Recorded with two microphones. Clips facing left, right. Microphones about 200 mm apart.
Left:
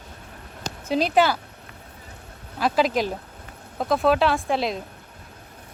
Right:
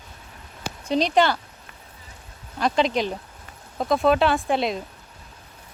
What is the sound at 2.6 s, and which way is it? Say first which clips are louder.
Speech: even; 5° left (ahead or behind).